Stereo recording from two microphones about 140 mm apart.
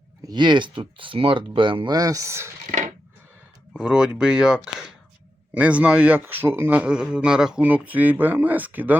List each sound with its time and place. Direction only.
0.2 s speech: 30° right (ahead or behind)
2.6 s a sound: 65° right (ahead or behind)
3.7 s speech: 5° right (ahead or behind)